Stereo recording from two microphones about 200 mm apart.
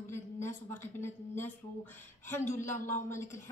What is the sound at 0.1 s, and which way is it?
A woman's voice, 10° left (ahead or behind).